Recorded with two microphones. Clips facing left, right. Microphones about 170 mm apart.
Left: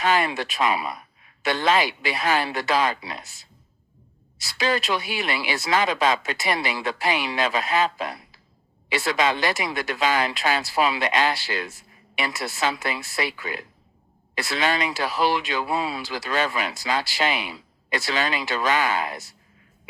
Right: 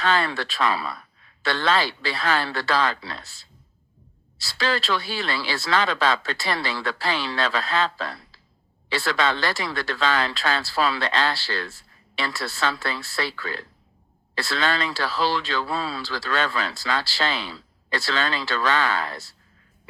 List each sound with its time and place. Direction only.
0.0 s speech: 20° left (ahead or behind)